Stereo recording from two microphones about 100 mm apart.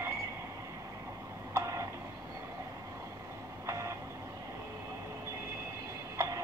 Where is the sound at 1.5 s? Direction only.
30° right (ahead or behind).